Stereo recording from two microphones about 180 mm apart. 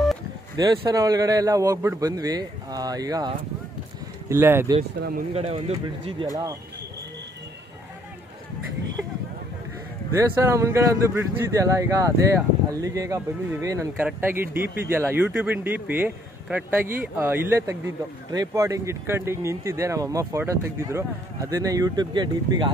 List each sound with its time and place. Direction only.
0.6 s a man's voice: 20° right (ahead or behind)
5.3 s speech: 35° right (ahead or behind)
10.1 s speech: 15° right (ahead or behind)